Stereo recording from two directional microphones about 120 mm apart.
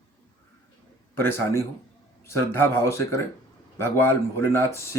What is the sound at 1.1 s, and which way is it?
A man's voice, 20° left (ahead or behind).